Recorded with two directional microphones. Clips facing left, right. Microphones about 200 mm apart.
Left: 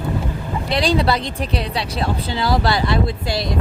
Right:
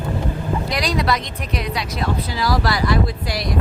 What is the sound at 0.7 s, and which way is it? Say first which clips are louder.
Speech: left 5 dB; 30° left (ahead or behind).